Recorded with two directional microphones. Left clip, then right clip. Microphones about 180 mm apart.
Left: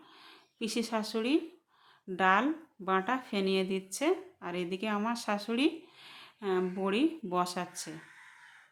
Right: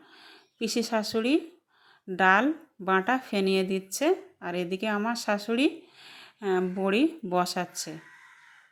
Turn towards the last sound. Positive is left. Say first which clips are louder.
# right 6 dB
turn(degrees=-25)  # may be behind; listen again after turning